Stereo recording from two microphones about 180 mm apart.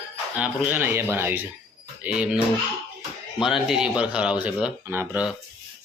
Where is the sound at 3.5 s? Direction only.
5° right (ahead or behind).